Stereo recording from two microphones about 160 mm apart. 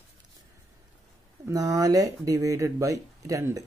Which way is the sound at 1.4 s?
20° right (ahead or behind).